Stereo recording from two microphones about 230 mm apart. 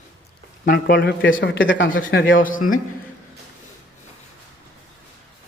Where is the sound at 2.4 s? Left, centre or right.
Left.